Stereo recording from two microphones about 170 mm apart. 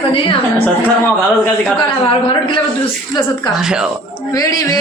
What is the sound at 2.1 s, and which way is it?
Speech, 30° left (ahead or behind).